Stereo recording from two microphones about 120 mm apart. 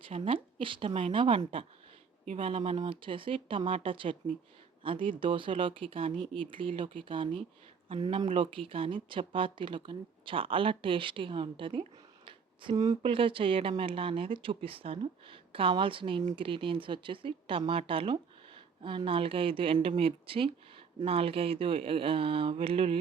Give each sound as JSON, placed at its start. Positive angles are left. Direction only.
{"t": 0.1, "sound": "speech", "side_deg": -50}
{"t": 13.0, "sound": "speech", "side_deg": -50}